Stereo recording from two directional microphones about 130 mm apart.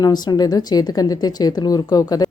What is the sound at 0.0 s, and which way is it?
A woman's voice, 30° left (ahead or behind).